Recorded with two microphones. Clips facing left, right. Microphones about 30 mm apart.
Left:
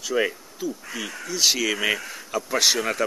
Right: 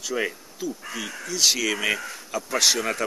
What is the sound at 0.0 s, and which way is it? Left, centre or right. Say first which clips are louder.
Speech: left 3 dB; centre.